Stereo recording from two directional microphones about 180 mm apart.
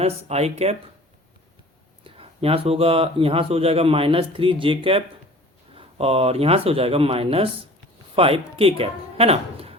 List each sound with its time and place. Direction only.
0.0 s speech: 35° right (ahead or behind)
2.0 s speech: 30° right (ahead or behind)